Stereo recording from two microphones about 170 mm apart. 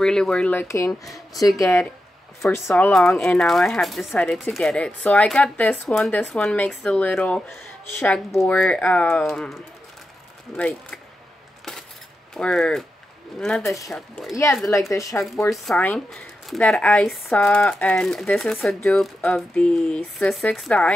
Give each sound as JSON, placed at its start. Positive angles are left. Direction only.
{"t": 0.0, "sound": "speech", "side_deg": 5}
{"t": 1.0, "sound": "speech", "side_deg": 0}
{"t": 2.7, "sound": "speech", "side_deg": 5}
{"t": 12.4, "sound": "speech", "side_deg": 5}
{"t": 14.3, "sound": "speech", "side_deg": 20}
{"t": 15.5, "sound": "speech", "side_deg": 0}